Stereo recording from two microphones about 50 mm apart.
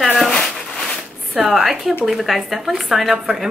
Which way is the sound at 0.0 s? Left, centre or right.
Centre.